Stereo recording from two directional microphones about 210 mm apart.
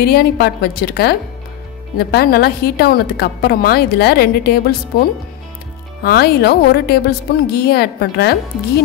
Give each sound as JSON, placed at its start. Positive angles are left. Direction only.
{"t": 0.0, "sound": "a woman's voice", "side_deg": 50}
{"t": 6.0, "sound": "a woman's voice", "side_deg": 50}